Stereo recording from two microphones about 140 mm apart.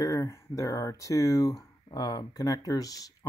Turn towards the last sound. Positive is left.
turn(degrees=25)  # may be behind; listen again after turning